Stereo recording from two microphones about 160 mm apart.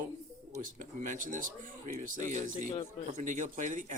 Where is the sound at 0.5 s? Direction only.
50° right (ahead or behind).